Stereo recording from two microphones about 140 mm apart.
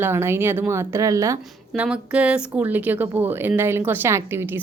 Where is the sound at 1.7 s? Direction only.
10° right (ahead or behind).